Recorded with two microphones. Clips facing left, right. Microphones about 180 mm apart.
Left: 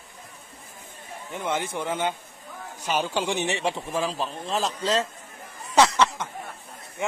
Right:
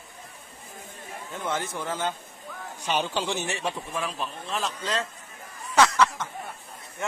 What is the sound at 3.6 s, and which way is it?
A man's voice, 30° left (ahead or behind).